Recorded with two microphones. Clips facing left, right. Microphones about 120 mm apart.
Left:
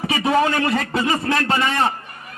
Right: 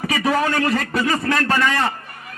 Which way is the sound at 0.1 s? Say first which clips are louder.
Left 2 dB; 25° left (ahead or behind).